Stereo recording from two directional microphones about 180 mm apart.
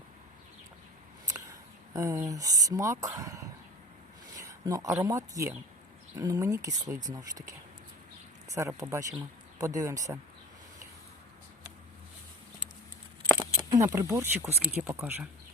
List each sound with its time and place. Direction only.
1.9 s speech: 20° right (ahead or behind)
8.5 s speech: 15° right (ahead or behind)
13.3 s speech: 20° right (ahead or behind)